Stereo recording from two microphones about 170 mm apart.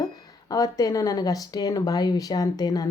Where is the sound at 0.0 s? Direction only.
20° left (ahead or behind).